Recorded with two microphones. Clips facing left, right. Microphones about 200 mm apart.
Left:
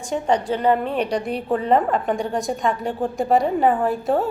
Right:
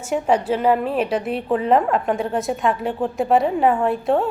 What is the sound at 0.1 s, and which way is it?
A woman's voice, 5° right (ahead or behind).